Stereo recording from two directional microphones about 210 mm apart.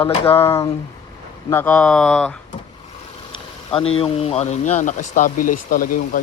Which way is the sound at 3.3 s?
25° left (ahead or behind).